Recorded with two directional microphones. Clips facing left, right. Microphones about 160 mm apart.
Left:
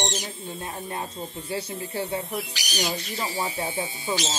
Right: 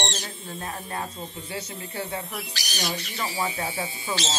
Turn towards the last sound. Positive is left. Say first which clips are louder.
# left 2 dB
turn(degrees=15)  # may be behind; listen again after turning